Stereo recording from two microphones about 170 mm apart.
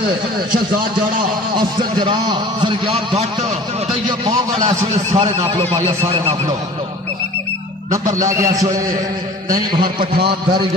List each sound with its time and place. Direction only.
1.8 s a man's voice: 25° right (ahead or behind)
4.9 s speech: 35° right (ahead or behind)
7.9 s a man's voice: 20° right (ahead or behind)
9.6 s a man's voice: 25° right (ahead or behind)